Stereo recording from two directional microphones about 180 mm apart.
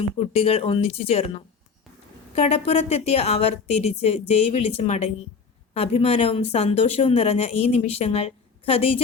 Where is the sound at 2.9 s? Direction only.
35° left (ahead or behind).